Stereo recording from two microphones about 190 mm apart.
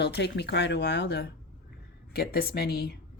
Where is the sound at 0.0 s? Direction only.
60° left (ahead or behind).